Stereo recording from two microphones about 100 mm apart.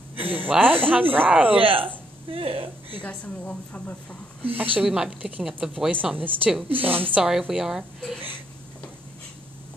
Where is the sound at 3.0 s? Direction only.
10° left (ahead or behind).